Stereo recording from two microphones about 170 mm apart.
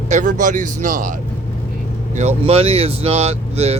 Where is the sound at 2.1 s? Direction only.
40° right (ahead or behind).